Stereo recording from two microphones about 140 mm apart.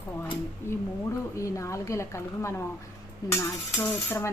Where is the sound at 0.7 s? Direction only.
15° left (ahead or behind).